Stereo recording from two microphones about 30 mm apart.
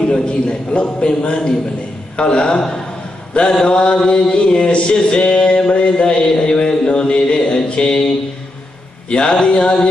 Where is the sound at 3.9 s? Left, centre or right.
Left.